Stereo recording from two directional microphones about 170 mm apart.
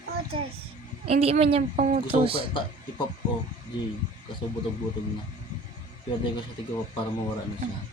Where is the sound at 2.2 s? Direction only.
35° right (ahead or behind).